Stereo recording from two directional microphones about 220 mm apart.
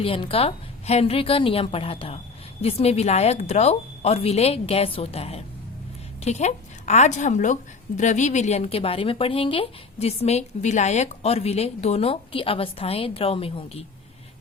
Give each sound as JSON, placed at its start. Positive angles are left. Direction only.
{"t": 0.0, "sound": "a woman's voice", "side_deg": 25}